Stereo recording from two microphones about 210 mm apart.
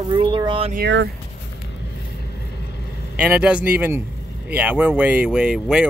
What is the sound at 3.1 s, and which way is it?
Speech, 5° right (ahead or behind).